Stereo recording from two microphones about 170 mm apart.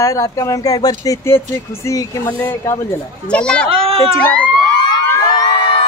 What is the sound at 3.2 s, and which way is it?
Speech, 5° left (ahead or behind).